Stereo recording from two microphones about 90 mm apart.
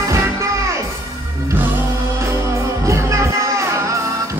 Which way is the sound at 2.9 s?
35° right (ahead or behind).